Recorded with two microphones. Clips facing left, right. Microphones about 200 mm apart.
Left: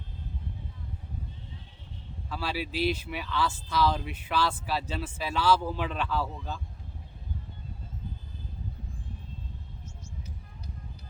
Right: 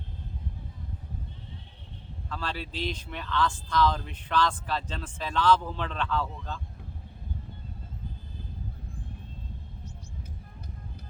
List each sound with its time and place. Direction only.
2.3 s speech: 10° left (ahead or behind)